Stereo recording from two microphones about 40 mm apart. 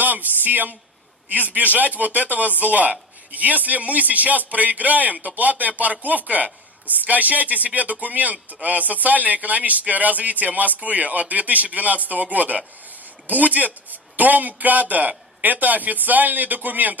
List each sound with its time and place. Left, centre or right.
0.0 s a man's voice: right